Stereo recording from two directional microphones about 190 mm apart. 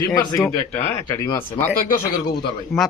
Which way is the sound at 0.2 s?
20° left (ahead or behind).